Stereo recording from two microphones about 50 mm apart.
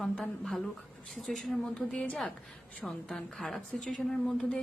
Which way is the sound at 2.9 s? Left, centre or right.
Centre.